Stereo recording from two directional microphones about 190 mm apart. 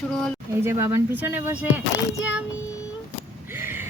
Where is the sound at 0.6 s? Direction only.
15° right (ahead or behind).